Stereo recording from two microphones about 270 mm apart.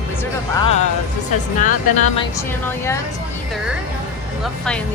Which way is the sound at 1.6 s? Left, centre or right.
Left.